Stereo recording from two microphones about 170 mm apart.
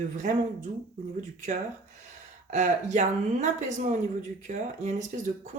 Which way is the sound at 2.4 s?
45° right (ahead or behind).